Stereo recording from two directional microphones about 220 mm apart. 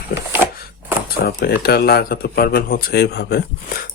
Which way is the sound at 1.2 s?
45° left (ahead or behind).